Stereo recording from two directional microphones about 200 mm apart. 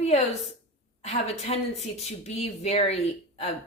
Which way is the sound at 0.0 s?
30° left (ahead or behind).